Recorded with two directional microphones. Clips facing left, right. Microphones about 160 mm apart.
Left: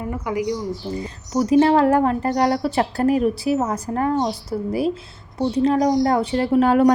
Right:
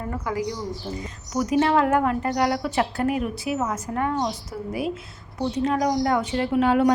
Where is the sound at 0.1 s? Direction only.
15° left (ahead or behind).